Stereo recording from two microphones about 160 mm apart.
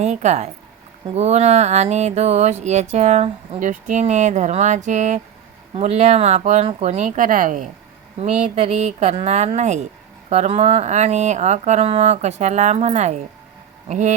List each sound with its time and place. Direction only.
0.0 s speech: 45° right (ahead or behind)